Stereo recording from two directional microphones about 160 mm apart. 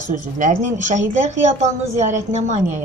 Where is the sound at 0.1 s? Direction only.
50° right (ahead or behind).